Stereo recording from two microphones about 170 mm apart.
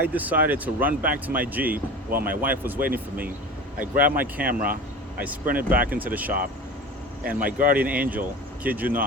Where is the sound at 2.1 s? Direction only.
60° right (ahead or behind).